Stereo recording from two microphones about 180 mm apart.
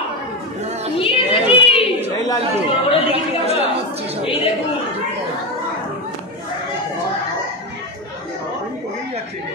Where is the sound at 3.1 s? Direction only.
35° right (ahead or behind).